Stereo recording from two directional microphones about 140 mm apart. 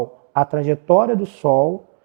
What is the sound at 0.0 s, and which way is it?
A man's voice, 20° right (ahead or behind).